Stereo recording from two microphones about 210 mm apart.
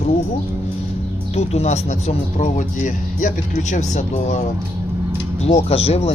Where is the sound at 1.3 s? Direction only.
30° left (ahead or behind).